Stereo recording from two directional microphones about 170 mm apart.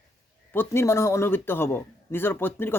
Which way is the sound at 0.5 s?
15° left (ahead or behind).